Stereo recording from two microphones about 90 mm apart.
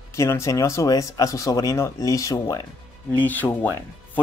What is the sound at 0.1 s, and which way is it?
Speech, 30° left (ahead or behind).